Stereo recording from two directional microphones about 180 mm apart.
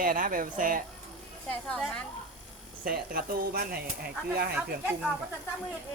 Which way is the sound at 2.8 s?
55° right (ahead or behind).